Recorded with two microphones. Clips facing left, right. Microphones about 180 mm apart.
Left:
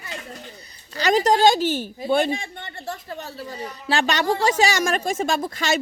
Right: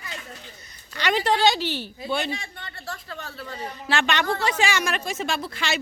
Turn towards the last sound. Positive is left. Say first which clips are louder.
# left 5 dB
turn(degrees=45)  # may be behind; listen again after turning